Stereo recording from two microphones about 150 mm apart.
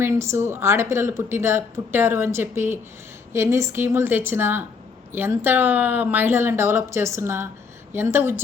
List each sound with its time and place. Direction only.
0.0 s speech: 20° right (ahead or behind)